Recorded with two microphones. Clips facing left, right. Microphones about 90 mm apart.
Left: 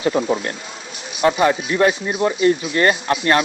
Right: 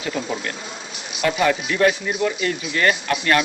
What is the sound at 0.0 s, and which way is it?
Speech, 35° left (ahead or behind).